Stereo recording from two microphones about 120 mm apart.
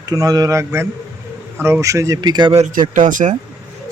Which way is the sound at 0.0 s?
30° right (ahead or behind).